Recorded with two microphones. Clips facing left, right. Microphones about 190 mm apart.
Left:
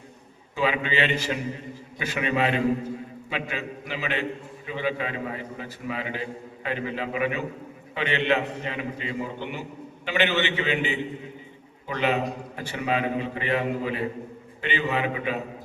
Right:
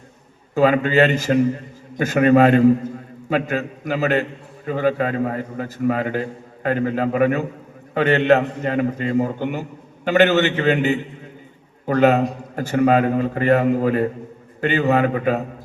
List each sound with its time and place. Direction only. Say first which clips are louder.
0.5 s a man's voice: right 10 dB; 45° right (ahead or behind)